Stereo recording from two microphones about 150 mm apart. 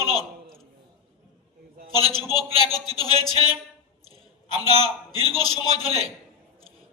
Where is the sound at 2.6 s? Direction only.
25° left (ahead or behind).